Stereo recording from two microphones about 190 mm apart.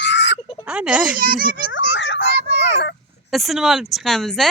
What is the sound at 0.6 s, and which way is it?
Speech, 5° right (ahead or behind).